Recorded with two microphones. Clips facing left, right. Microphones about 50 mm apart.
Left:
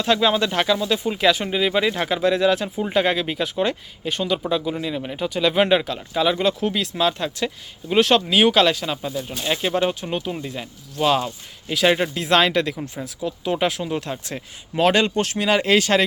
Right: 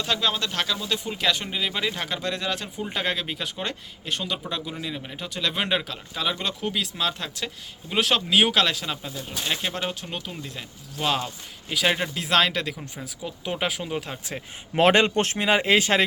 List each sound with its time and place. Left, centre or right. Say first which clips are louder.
0.2 s speech: left 7 dB; centre
0.8 s speech: left 7 dB; centre
10.9 s speech: left 6 dB; centre
14.8 s speech: left 1 dB; right
15.4 s speech: left 3 dB; centre